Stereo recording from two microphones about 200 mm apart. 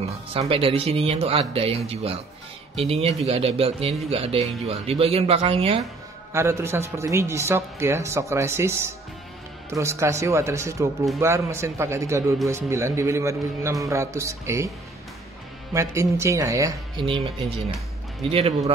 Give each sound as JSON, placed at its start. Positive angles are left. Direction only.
{"t": 0.0, "sound": "a man's voice", "side_deg": -30}
{"t": 6.3, "sound": "speech", "side_deg": -15}
{"t": 15.7, "sound": "a man's voice", "side_deg": -15}